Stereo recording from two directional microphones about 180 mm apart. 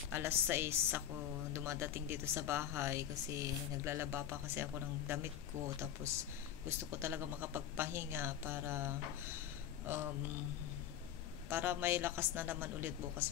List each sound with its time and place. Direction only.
0.1 s speech: 10° right (ahead or behind)
11.4 s speech: 10° right (ahead or behind)